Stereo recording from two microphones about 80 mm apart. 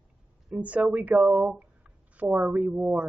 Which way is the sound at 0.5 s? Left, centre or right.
Centre.